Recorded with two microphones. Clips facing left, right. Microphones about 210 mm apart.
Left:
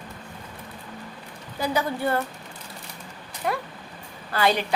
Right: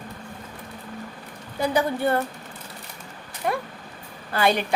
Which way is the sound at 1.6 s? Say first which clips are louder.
Right 3 dB; 25° right (ahead or behind).